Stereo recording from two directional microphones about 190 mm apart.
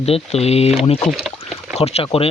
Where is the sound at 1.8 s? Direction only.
35° left (ahead or behind).